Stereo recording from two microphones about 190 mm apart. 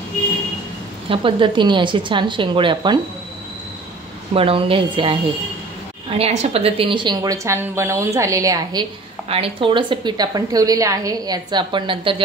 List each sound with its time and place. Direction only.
1.0 s a woman's voice: 25° right (ahead or behind)
4.3 s a woman's voice: 30° right (ahead or behind)
9.3 s a woman's voice: 30° right (ahead or behind)